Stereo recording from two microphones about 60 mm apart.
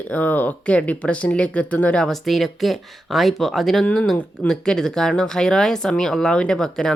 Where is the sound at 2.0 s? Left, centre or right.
Centre.